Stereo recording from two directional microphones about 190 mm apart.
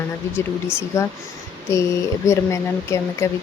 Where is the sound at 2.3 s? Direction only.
15° left (ahead or behind).